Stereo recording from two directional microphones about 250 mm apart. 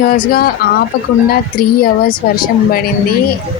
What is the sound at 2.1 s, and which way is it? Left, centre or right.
Speech, left.